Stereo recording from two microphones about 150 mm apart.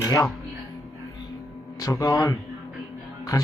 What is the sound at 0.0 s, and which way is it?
Speech, 25° left (ahead or behind).